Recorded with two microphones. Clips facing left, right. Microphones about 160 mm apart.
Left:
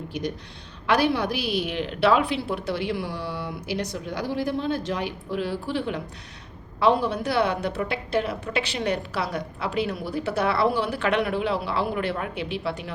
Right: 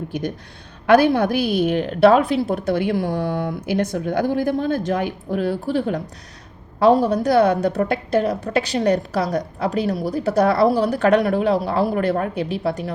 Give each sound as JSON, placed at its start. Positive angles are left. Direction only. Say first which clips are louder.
{"t": 0.1, "sound": "a woman's voice", "louder": "right 4 dB", "side_deg": -50}